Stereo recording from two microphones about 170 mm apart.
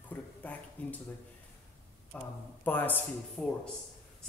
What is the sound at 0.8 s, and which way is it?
Speech, 10° left (ahead or behind).